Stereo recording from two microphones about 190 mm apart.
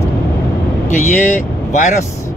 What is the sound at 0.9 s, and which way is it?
Speech, 40° left (ahead or behind).